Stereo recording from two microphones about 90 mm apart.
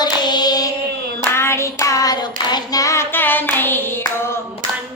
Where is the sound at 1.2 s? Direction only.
30° left (ahead or behind); by 2.8 s 50° left (ahead or behind).